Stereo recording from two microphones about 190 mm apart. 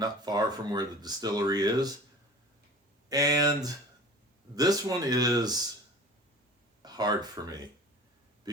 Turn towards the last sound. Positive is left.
turn(degrees=-20)  # may be behind; listen again after turning